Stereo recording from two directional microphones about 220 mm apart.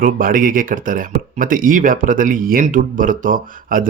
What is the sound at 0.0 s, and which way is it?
Speech, 40° right (ahead or behind).